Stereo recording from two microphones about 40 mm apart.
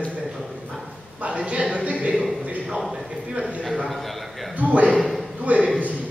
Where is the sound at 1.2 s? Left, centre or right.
Right.